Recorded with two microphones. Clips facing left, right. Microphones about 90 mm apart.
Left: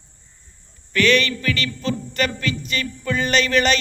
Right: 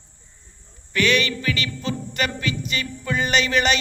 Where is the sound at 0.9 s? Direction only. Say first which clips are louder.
Left 3 dB; 15° right (ahead or behind).